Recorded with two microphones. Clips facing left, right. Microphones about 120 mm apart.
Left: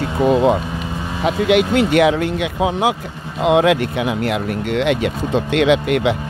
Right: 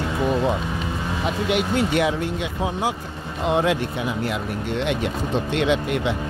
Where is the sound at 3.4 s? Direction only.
85° left.